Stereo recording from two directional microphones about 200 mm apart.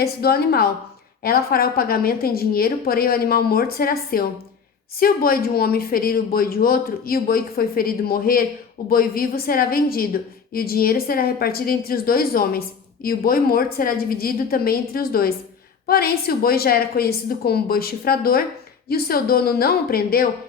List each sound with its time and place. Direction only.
0.0 s a woman's voice: 50° left (ahead or behind)